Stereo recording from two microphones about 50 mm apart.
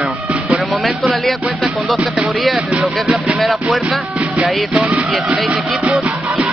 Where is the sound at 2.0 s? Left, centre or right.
Right.